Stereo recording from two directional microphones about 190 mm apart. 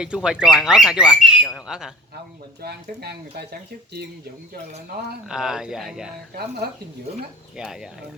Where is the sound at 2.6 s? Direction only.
55° right (ahead or behind).